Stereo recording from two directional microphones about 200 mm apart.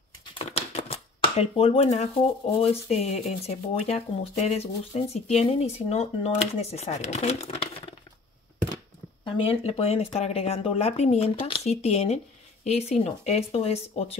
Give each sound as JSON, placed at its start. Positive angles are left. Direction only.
{"t": 0.3, "sound": "typewriter", "side_deg": 30}
{"t": 2.6, "sound": "speech", "side_deg": 30}
{"t": 9.2, "sound": "speech", "side_deg": 30}